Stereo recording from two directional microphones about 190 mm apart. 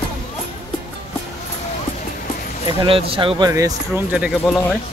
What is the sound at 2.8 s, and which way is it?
Speech, 30° right (ahead or behind).